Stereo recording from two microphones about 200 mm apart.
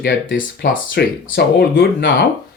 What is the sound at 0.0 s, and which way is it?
Speech, 55° left (ahead or behind).